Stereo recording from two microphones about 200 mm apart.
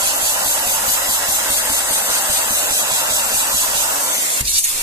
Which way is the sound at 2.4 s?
15° right (ahead or behind).